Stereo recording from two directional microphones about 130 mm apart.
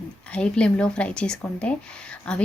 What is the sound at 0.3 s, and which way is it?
Speech, 10° left (ahead or behind).